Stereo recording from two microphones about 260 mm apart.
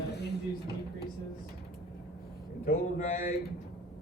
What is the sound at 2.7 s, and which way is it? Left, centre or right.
Speech, left.